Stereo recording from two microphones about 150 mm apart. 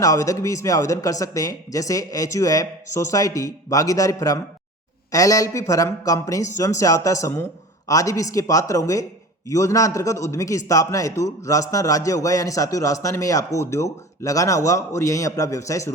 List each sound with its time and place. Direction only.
0.0 s a man's voice: 20° left (ahead or behind)